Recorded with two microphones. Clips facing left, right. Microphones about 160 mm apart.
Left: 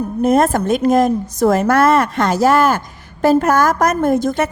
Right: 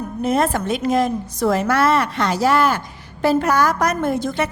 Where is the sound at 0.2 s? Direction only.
50° left (ahead or behind).